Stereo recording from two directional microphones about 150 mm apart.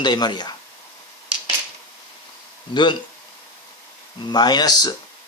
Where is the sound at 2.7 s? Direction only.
30° left (ahead or behind).